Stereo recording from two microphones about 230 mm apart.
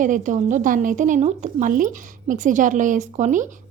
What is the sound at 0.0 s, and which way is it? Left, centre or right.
A woman's voice, right.